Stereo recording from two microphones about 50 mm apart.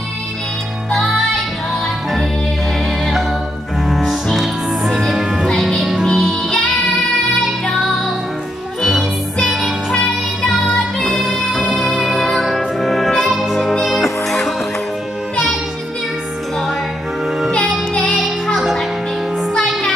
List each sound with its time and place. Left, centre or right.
3.8 s music: centre
8.8 s music: centre
9.9 s music: centre
17.6 s music: left
18.6 s music: centre